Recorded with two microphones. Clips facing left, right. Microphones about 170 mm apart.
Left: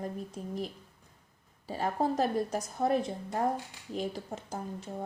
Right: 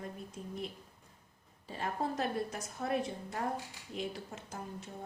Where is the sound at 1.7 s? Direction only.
35° left (ahead or behind).